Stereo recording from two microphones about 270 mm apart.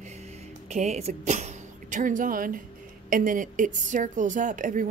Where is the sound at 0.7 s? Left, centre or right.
Right.